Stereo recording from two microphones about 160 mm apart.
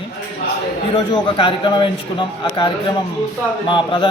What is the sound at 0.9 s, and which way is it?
A man's voice, 30° left (ahead or behind).